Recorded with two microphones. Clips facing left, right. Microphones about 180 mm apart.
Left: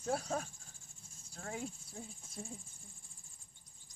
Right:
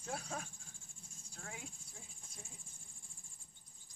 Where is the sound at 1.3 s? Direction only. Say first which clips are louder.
Left 9 dB; 40° left (ahead or behind).